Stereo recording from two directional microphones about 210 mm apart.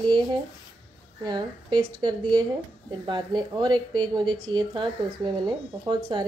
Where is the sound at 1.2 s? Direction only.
20° right (ahead or behind).